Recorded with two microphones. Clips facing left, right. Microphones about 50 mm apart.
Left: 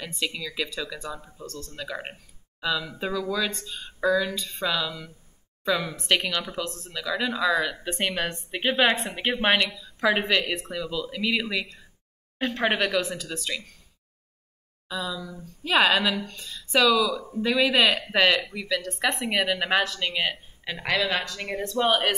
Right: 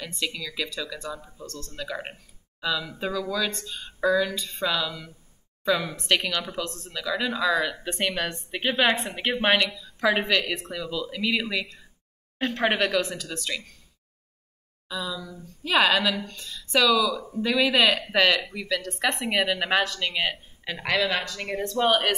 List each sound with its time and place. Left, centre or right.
0.2 s a woman's voice: centre
3.1 s speech: centre
3.4 s a woman's voice: centre
14.9 s speech: centre
15.1 s a woman's voice: left
15.6 s speech: centre
17.1 s a woman's voice: left
17.4 s a woman's voice: centre